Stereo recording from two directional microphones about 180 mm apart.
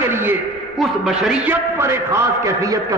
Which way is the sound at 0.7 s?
Centre (ahead or behind).